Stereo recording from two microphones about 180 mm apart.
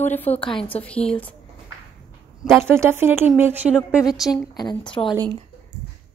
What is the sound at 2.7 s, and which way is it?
Speech, 15° right (ahead or behind).